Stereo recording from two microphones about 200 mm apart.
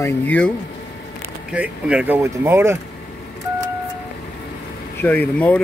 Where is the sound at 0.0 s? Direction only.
10° left (ahead or behind).